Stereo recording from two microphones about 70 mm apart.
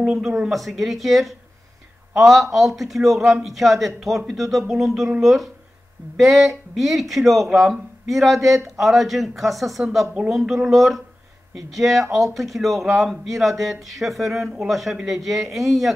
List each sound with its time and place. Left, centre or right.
0.0 s speech: centre
10.0 s speech: centre
10.4 s speech: centre